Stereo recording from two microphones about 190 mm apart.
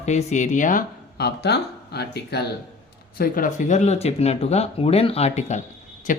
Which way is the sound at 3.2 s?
45° left (ahead or behind).